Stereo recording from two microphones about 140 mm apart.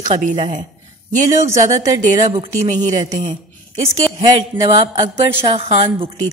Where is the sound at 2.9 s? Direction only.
55° right (ahead or behind).